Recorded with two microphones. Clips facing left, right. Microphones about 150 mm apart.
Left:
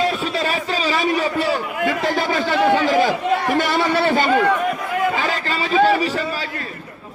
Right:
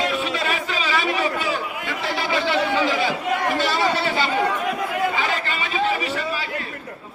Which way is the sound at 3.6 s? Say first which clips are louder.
Left 3 dB; 55° left (ahead or behind).